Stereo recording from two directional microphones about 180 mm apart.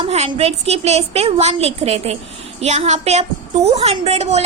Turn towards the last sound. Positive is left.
turn(degrees=-35)  # may be behind; listen again after turning